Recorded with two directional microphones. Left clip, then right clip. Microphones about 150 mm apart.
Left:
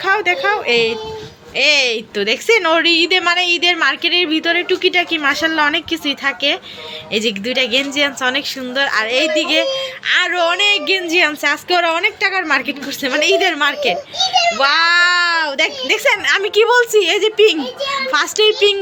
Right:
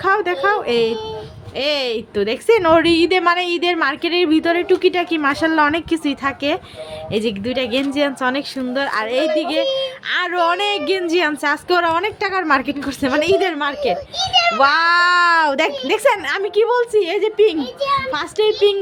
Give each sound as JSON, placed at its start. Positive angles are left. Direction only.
{"t": 0.0, "sound": "a woman's voice", "side_deg": -40}
{"t": 9.7, "sound": "a woman's voice", "side_deg": -30}
{"t": 14.2, "sound": "a child's voice", "side_deg": 5}
{"t": 14.6, "sound": "a woman's voice", "side_deg": -40}
{"t": 16.0, "sound": "a woman's voice", "side_deg": -40}
{"t": 16.3, "sound": "a child's voice", "side_deg": -15}